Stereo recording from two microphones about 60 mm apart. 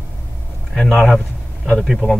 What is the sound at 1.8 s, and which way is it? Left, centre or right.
Speech, centre.